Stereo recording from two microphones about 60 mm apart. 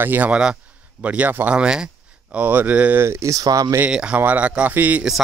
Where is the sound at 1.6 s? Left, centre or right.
Centre.